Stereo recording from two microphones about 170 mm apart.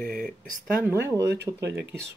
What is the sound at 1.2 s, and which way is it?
Speech, 85° right.